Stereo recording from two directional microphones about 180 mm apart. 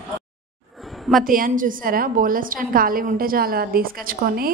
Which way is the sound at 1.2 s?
50° right (ahead or behind).